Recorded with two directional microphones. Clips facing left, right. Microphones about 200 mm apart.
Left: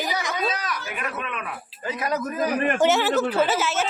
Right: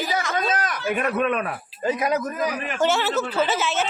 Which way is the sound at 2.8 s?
15° left (ahead or behind).